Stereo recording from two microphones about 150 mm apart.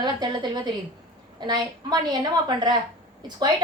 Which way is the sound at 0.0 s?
30° right (ahead or behind).